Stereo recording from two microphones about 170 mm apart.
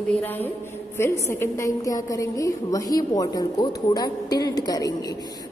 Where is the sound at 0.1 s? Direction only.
10° left (ahead or behind).